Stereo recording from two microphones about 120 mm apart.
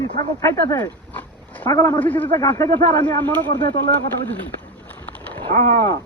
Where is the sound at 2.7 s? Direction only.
15° left (ahead or behind).